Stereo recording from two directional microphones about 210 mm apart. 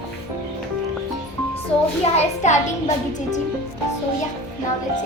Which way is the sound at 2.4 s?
35° left (ahead or behind).